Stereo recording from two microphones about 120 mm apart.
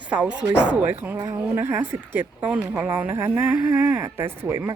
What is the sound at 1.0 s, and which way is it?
Speech, 25° right (ahead or behind).